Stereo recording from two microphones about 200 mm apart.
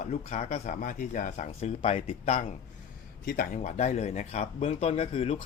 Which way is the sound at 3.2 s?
45° left (ahead or behind).